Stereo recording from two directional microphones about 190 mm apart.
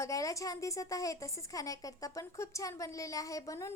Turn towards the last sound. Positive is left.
turn(degrees=15)  # may be behind; listen again after turning